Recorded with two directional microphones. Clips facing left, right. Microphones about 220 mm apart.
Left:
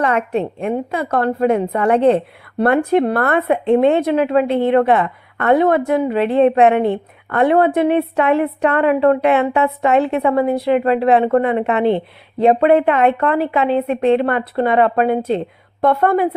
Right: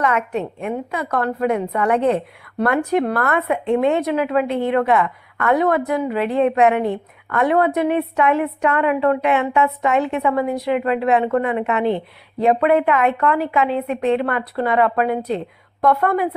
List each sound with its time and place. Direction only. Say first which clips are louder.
0.0 s a woman's voice: left 3 dB; 30° left (ahead or behind)